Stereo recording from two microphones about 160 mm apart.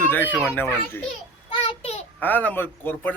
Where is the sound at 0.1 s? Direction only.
10° left (ahead or behind).